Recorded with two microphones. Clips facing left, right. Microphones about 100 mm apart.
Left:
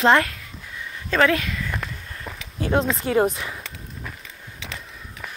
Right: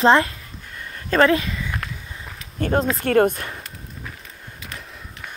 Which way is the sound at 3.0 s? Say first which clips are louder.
Right 5 dB; 65° right (ahead or behind).